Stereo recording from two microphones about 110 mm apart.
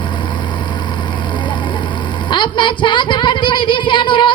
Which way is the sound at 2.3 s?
45° left (ahead or behind).